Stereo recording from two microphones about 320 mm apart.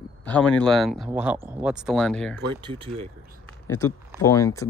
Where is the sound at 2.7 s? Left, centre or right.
Centre.